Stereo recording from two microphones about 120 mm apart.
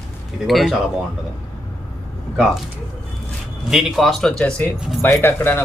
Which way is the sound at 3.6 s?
5° right (ahead or behind).